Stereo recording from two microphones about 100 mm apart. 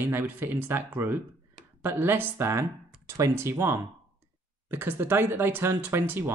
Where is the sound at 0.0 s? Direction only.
20° right (ahead or behind).